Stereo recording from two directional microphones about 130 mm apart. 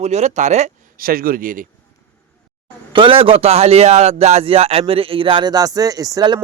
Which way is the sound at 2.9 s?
40° right (ahead or behind).